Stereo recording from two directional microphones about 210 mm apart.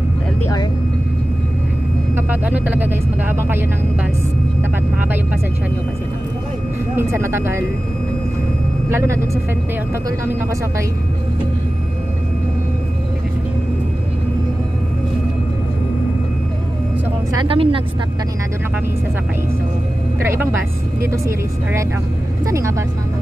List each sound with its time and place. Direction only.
2.1 s speech: 10° right (ahead or behind)
7.0 s speech: 10° right (ahead or behind)
8.9 s speech: 15° right (ahead or behind)
17.3 s speech: 20° right (ahead or behind)
20.2 s a woman's voice: 10° right (ahead or behind)
22.5 s speech: 15° right (ahead or behind)